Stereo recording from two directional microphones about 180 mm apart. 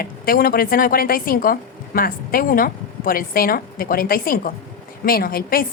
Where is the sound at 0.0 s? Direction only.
55° left (ahead or behind).